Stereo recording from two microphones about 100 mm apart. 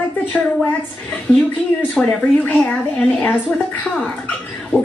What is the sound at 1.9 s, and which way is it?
Speech, 10° left (ahead or behind).